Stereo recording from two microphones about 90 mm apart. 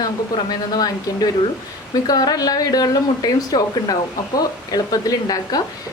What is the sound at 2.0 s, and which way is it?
A woman's voice, 45° left (ahead or behind).